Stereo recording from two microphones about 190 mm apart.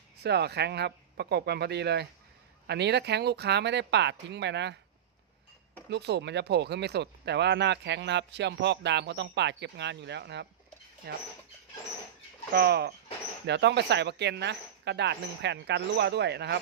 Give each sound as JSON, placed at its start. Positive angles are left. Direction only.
{"t": 0.2, "sound": "speech", "side_deg": -60}
{"t": 5.9, "sound": "speech", "side_deg": -65}
{"t": 12.5, "sound": "speech", "side_deg": -55}